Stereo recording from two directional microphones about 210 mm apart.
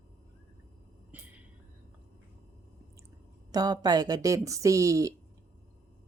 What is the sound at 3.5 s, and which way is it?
Speech, 20° right (ahead or behind).